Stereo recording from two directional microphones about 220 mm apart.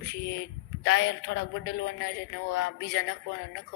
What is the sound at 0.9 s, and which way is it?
Speech, 55° left (ahead or behind).